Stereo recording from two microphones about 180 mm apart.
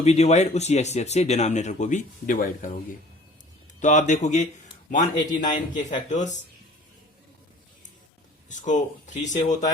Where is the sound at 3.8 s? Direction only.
45° left (ahead or behind).